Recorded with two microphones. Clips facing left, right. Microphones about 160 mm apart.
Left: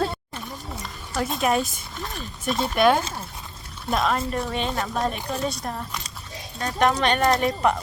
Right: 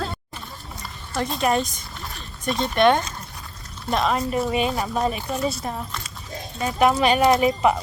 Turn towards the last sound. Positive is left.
turn(degrees=-5)  # may be behind; listen again after turning